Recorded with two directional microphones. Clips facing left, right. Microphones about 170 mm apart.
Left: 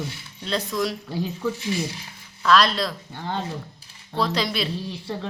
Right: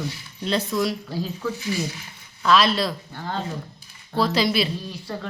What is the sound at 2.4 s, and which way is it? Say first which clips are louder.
Speech: even; centre (ahead or behind).